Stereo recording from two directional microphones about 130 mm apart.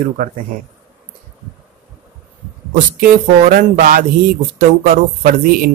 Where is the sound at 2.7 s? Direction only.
90° right.